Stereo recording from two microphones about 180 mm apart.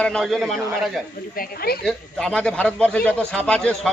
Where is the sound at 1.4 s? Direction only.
55° left (ahead or behind).